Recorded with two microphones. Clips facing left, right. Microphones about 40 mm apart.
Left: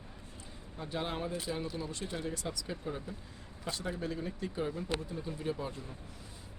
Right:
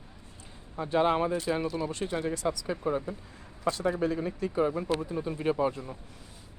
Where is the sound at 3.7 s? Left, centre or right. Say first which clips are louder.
Right 8 dB; right.